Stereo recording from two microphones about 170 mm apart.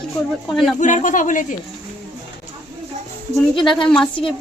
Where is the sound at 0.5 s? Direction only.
Centre (ahead or behind).